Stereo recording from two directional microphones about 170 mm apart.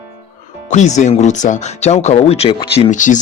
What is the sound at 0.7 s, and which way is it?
Speech, 45° left (ahead or behind).